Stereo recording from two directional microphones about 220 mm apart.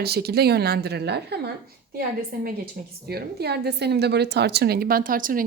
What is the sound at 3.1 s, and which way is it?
A woman's voice, 45° right (ahead or behind).